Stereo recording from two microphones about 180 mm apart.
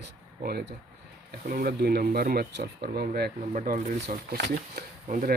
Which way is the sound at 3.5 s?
50° right (ahead or behind).